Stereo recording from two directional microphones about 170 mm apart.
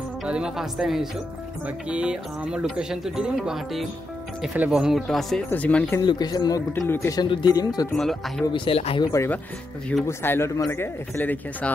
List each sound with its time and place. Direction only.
0.2 s speech: 5° right (ahead or behind)
5.9 s speech: 25° left (ahead or behind)
7.9 s speech: centre (ahead or behind)
8.5 s speech: 35° left (ahead or behind)
9.0 s speech: 15° left (ahead or behind)